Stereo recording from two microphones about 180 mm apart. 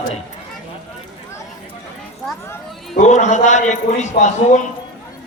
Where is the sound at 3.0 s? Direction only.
40° left (ahead or behind).